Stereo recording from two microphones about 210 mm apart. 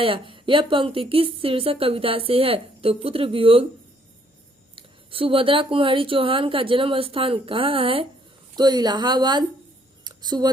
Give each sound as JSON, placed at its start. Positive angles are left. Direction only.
{"t": 0.0, "sound": "a woman's voice", "side_deg": -25}
{"t": 4.7, "sound": "a woman's voice", "side_deg": -25}
{"t": 10.0, "sound": "a sound", "side_deg": -20}